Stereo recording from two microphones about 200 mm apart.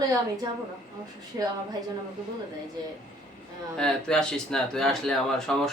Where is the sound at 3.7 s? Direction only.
5° left (ahead or behind).